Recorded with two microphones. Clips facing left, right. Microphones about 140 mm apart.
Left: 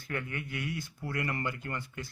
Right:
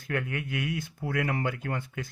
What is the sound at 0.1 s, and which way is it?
Speech, 90° right.